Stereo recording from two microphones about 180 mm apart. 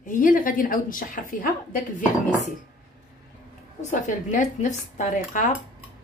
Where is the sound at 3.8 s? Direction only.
45° left (ahead or behind).